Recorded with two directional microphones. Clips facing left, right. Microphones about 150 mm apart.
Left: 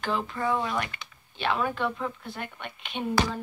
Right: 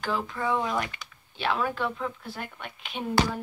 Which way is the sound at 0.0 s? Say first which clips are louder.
Left 1 dB; centre (ahead or behind).